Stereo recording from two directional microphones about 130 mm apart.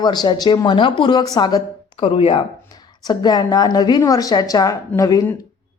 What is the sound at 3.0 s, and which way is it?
A woman's voice, 30° left (ahead or behind).